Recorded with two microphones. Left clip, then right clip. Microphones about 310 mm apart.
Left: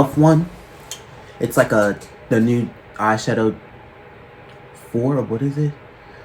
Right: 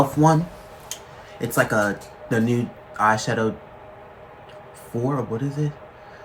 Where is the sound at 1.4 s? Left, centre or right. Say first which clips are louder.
Left 5 dB; centre.